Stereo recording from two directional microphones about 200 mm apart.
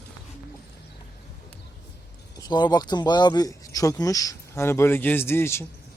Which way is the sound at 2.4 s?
20° left (ahead or behind).